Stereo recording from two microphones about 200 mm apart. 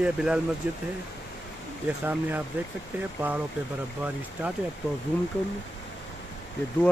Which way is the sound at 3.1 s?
10° right (ahead or behind).